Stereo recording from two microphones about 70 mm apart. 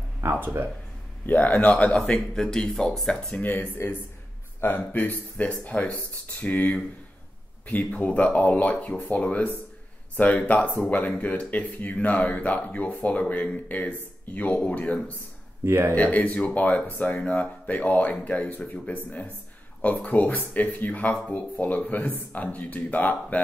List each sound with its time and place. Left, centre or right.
0.2 s speech: right
1.2 s speech: left; by 3.3 s centre
3.3 s speech: left
15.6 s speech: right
15.9 s speech: left